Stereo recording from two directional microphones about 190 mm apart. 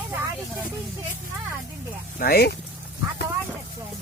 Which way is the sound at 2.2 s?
55° left (ahead or behind).